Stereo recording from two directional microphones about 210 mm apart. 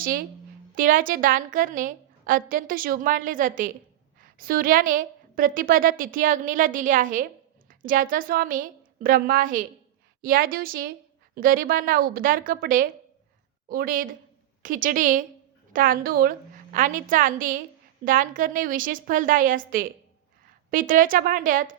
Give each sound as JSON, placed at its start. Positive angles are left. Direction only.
{"t": 0.0, "sound": "a woman's voice", "side_deg": -45}